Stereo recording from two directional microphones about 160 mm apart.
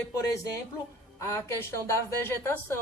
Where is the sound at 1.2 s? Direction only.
15° left (ahead or behind).